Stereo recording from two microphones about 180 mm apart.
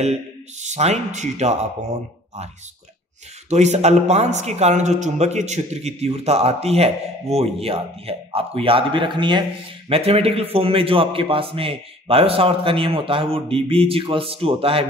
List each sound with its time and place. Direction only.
0.0 s speech: 40° right (ahead or behind)
3.4 s speech: 40° right (ahead or behind)